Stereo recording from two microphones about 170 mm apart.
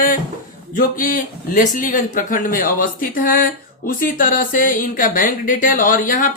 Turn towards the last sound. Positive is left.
turn(degrees=55)  # may be behind; listen again after turning